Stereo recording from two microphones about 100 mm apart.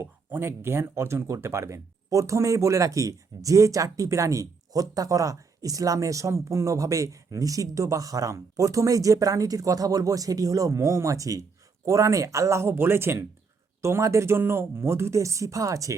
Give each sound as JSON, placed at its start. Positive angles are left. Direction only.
{"t": 0.0, "sound": "speech", "side_deg": -25}